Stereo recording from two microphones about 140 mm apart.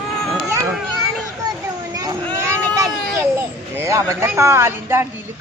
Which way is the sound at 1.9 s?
25° right (ahead or behind).